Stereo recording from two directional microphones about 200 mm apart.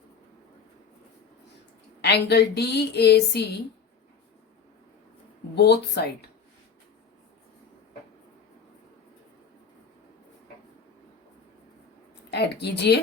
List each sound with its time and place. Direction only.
2.0 s speech: 55° left (ahead or behind)
5.5 s speech: 55° left (ahead or behind)
12.3 s speech: 55° left (ahead or behind)